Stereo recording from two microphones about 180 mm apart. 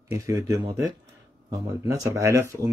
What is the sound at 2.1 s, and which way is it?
Speech, 15° right (ahead or behind).